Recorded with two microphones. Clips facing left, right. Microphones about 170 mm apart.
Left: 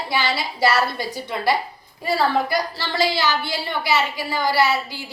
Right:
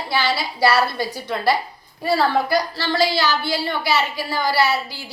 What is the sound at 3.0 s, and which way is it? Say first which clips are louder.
A woman's voice: right 1 dB; 20° left (ahead or behind).